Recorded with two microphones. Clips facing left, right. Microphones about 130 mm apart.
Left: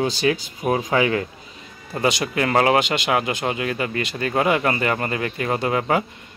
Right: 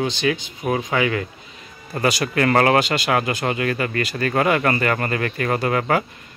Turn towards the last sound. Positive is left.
turn(degrees=15)  # may be behind; listen again after turning